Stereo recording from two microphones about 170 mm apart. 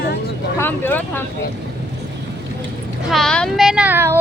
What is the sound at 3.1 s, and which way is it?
Speech, 5° left (ahead or behind).